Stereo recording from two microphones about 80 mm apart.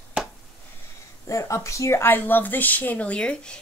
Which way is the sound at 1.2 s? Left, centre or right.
Left.